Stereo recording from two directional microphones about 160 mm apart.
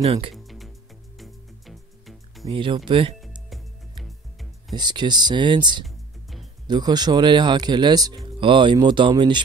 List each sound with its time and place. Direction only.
0.0 s speech: 40° right (ahead or behind)
0.3 s music: centre (ahead or behind)
2.5 s speech: 30° right (ahead or behind)
4.0 s music: centre (ahead or behind)
4.7 s speech: 25° right (ahead or behind)